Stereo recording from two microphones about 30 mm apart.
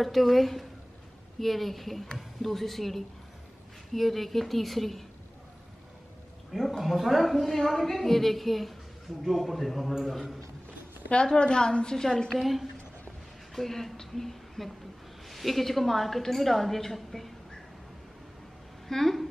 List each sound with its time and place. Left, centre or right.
0.0 s a woman's voice: centre
6.8 s a woman's voice: centre
11.3 s a woman's voice: left
12.4 s a woman's voice: centre
13.6 s a woman's voice: centre
18.9 s speech: centre